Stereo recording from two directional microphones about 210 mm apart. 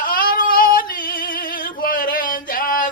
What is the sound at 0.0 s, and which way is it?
Female singing, 40° left (ahead or behind).